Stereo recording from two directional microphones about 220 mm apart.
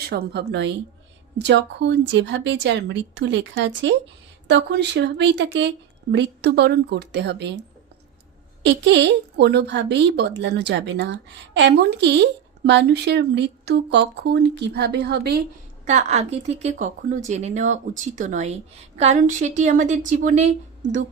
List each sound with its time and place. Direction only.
0.1 s speech: 50° right (ahead or behind)
8.6 s speech: 55° right (ahead or behind)
15.9 s speech: 30° right (ahead or behind)